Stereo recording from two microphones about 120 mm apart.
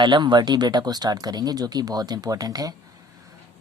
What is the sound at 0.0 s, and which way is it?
Speech, 40° right (ahead or behind).